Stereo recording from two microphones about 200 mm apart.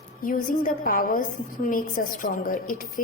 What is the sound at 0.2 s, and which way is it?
A woman's voice, 45° left (ahead or behind).